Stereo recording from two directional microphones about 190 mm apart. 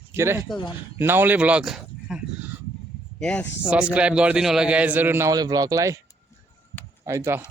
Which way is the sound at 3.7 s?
5° right (ahead or behind).